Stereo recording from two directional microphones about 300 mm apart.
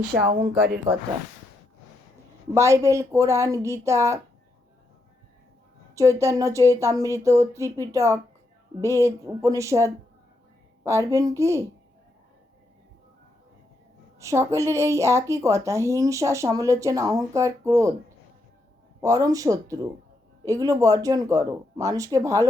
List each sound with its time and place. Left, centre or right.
0.6 s speech: right
2.6 s a woman's voice: centre
5.9 s a woman's voice: centre
14.2 s a woman's voice: centre
19.0 s a woman's voice: centre